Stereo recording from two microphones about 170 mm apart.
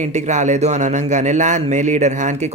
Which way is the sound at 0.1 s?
45° right (ahead or behind).